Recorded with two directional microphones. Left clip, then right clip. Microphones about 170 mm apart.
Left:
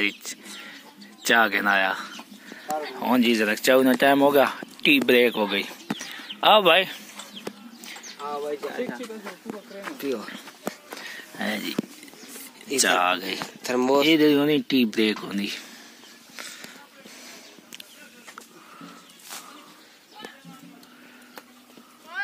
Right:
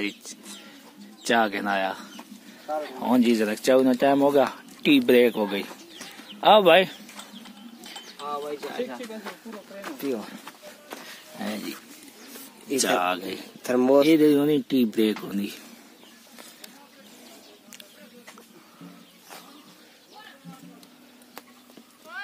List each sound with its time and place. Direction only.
0.0 s speech: 5° right (ahead or behind)
6.4 s speech: 10° right (ahead or behind)
8.2 s speech: 25° right (ahead or behind)
9.9 s speech: 55° right (ahead or behind)
11.3 s speech: centre (ahead or behind)
12.7 s speech: 5° right (ahead or behind)
13.6 s speech: 55° right (ahead or behind)
14.0 s speech: 5° right (ahead or behind)